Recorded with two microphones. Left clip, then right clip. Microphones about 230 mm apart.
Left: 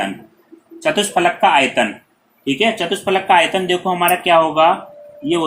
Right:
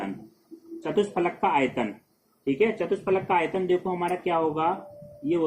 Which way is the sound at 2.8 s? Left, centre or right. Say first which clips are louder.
Left 10 dB; left.